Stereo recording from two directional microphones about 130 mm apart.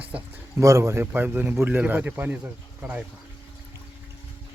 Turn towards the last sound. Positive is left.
turn(degrees=-10)  # may be behind; listen again after turning